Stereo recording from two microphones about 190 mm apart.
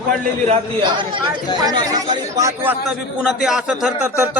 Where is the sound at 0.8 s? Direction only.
25° right (ahead or behind).